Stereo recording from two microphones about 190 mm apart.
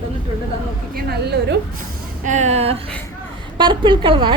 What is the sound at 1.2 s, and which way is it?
Speech, 60° right (ahead or behind).